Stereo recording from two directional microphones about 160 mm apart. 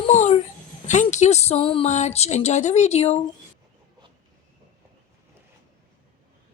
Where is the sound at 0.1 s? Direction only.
50° left (ahead or behind).